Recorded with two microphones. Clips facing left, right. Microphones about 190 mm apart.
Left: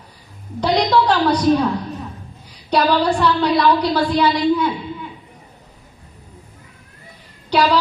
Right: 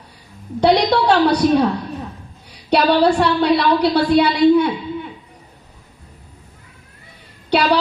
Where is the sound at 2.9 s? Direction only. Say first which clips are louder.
Right 2 dB; 65° right (ahead or behind).